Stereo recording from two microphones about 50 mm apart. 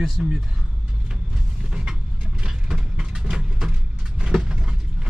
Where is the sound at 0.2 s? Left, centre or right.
Centre.